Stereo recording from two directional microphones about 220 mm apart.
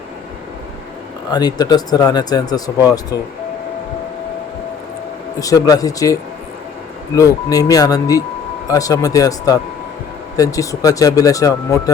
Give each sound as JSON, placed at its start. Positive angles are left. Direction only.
{"t": 1.3, "sound": "speech", "side_deg": 20}
{"t": 5.4, "sound": "speech", "side_deg": 15}
{"t": 7.2, "sound": "speech", "side_deg": 15}